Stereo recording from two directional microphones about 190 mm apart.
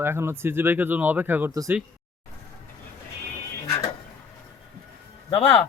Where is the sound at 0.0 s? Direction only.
15° right (ahead or behind).